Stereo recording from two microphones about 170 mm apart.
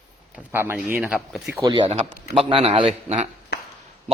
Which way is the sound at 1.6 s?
20° right (ahead or behind).